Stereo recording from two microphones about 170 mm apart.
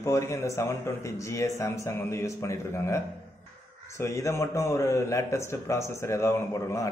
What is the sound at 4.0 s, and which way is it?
A man's voice, 15° left (ahead or behind).